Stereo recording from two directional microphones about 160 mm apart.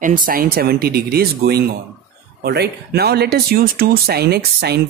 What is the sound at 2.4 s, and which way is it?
Speech, 90° right.